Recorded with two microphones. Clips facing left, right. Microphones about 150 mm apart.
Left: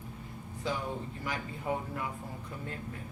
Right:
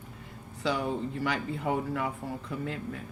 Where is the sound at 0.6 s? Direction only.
75° right (ahead or behind).